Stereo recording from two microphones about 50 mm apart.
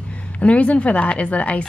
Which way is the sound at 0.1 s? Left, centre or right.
Left.